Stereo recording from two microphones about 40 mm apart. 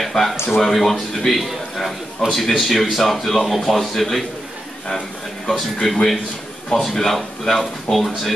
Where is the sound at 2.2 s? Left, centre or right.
Centre.